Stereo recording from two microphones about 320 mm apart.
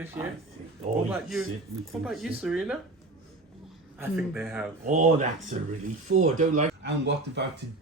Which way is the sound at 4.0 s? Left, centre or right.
Centre.